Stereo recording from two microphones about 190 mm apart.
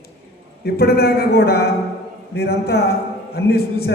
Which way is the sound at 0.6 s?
55° left (ahead or behind).